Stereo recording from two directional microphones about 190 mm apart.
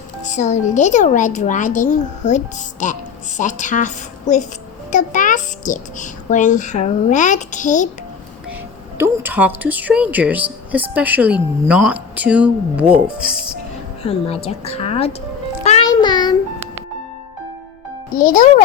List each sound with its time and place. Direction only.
0.3 s a child's voice: 40° left (ahead or behind)
9.0 s speech: 10° right (ahead or behind)
14.0 s a child's voice: 30° left (ahead or behind)
15.9 s child singing: 20° left (ahead or behind)
18.2 s a child's voice: 45° left (ahead or behind)